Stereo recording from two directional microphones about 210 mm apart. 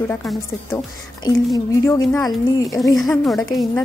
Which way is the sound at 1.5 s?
15° left (ahead or behind).